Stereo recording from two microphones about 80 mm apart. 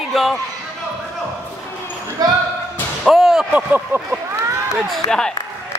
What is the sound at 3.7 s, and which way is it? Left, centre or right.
Speech, right.